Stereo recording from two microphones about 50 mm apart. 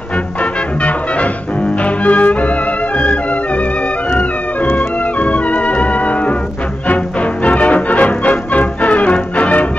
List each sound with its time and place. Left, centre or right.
0.4 s music: left
4.1 s music: left